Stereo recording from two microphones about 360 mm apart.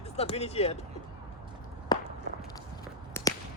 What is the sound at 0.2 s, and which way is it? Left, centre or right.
Speech, centre.